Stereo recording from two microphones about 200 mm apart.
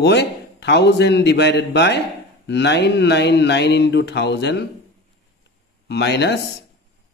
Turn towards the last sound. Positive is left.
turn(degrees=60)  # may be behind; listen again after turning